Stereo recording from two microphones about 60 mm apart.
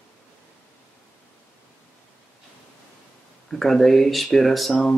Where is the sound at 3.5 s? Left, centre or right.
Centre.